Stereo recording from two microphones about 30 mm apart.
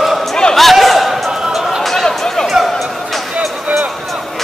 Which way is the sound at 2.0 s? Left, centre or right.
Centre.